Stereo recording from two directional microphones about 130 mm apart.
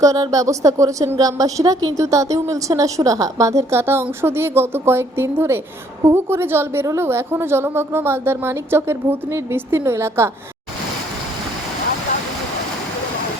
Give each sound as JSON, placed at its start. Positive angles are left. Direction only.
{"t": 0.0, "sound": "a woman's voice", "side_deg": -25}